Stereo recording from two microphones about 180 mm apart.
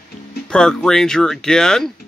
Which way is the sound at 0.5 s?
5° left (ahead or behind).